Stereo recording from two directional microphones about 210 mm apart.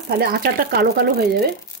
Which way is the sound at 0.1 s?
45° right (ahead or behind).